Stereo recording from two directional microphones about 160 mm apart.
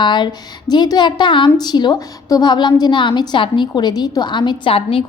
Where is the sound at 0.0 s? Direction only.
30° left (ahead or behind).